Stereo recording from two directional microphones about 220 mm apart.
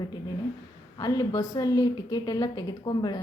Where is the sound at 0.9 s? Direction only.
15° left (ahead or behind).